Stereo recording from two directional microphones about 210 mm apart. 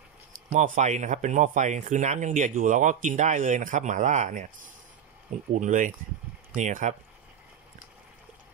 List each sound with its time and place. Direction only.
0.5 s speech: 35° right (ahead or behind)